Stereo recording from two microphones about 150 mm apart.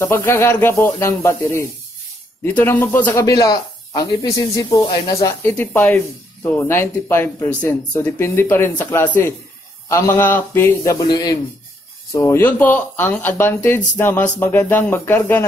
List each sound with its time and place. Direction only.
0.0 s a man's voice: 15° left (ahead or behind)